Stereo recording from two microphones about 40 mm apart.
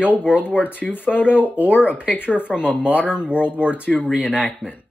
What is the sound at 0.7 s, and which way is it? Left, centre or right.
Speech, left.